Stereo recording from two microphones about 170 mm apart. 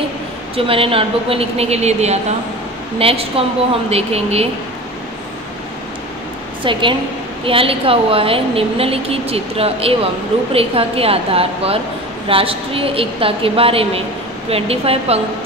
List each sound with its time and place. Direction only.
0.6 s a woman's voice: 30° right (ahead or behind)
6.6 s a woman's voice: 30° right (ahead or behind)